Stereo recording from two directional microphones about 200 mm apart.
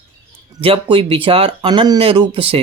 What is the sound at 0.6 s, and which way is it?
Speech, 25° right (ahead or behind).